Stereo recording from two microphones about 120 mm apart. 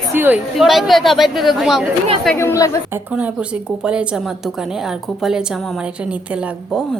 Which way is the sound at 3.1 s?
10° right (ahead or behind).